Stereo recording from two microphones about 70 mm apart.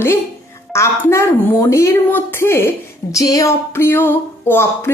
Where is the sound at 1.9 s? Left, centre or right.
Left.